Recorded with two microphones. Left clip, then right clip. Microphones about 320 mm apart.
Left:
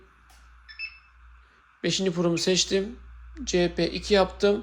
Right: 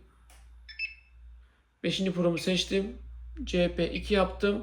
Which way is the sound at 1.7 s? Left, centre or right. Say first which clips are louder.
Left 4 dB; centre.